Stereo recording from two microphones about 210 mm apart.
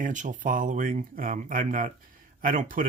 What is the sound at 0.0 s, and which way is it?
Speech, 35° right (ahead or behind).